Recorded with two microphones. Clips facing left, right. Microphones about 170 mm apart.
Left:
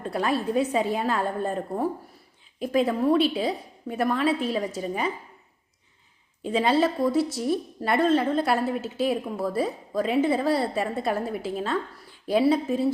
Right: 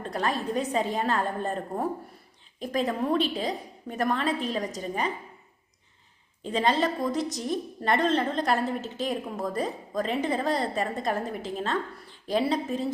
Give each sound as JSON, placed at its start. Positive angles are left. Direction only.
{"t": 0.0, "sound": "a woman's voice", "side_deg": 10}
{"t": 6.4, "sound": "a woman's voice", "side_deg": 5}